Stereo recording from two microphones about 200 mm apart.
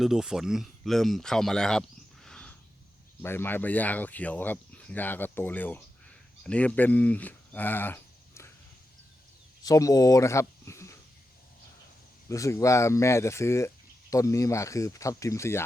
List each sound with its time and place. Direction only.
0.0 s speech: 5° right (ahead or behind)
2.2 s a sound: 5° left (ahead or behind)
3.2 s speech: 10° left (ahead or behind)
9.6 s speech: 15° left (ahead or behind)
12.3 s speech: 15° left (ahead or behind)